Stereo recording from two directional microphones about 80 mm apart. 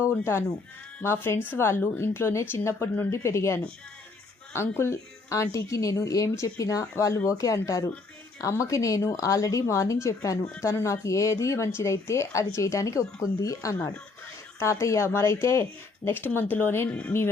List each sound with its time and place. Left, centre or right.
0.0 s speech: left